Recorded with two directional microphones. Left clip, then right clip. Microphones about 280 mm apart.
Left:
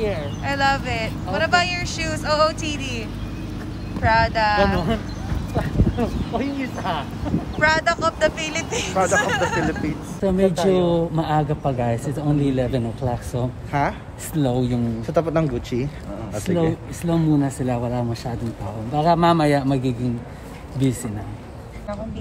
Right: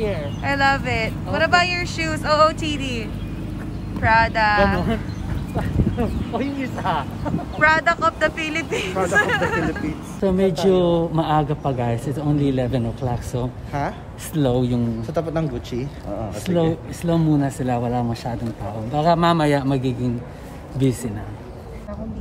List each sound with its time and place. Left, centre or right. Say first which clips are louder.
0.0 s speech: even; centre
13.7 s speech: left 4 dB; left
14.3 s speech: right 2 dB; centre
15.0 s speech: left 6 dB; left
17.0 s speech: even; centre